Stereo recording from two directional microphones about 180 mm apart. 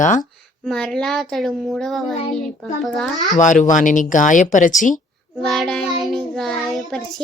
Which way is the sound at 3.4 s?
45° left (ahead or behind).